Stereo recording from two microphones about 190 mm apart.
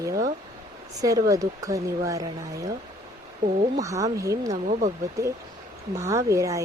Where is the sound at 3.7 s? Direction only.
15° right (ahead or behind).